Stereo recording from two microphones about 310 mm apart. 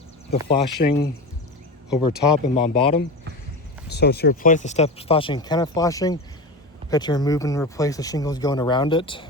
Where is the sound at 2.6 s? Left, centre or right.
Centre.